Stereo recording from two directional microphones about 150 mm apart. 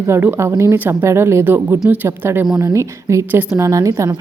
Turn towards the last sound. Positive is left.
turn(degrees=-25)  # may be behind; listen again after turning